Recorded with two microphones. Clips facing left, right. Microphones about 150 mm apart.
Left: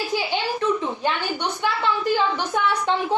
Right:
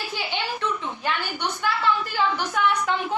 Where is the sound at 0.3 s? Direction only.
40° left (ahead or behind).